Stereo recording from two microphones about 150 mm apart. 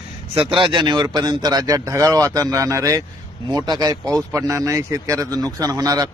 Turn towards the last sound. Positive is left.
turn(degrees=-25)  # may be behind; listen again after turning